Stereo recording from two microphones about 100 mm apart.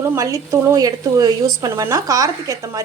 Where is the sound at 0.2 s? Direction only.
30° right (ahead or behind).